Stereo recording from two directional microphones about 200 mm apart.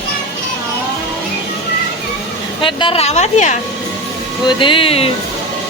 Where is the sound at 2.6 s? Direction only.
25° left (ahead or behind).